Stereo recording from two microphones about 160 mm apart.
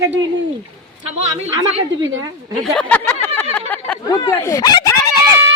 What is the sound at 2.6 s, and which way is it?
Speech, 5° left (ahead or behind).